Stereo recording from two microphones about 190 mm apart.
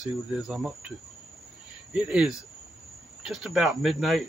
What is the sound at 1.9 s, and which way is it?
Speech, 5° right (ahead or behind).